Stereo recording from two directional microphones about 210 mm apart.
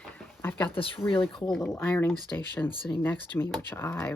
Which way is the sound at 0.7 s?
25° left (ahead or behind).